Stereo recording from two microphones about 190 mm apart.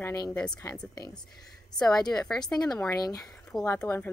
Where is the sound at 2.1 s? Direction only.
5° left (ahead or behind).